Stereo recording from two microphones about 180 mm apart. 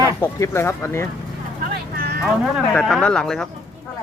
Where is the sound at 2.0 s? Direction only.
60° right (ahead or behind).